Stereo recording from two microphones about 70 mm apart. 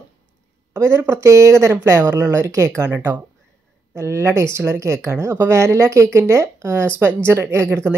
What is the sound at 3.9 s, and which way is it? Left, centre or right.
Speech, right.